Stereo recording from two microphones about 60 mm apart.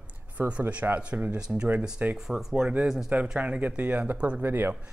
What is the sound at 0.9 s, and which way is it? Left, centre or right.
Speech, right.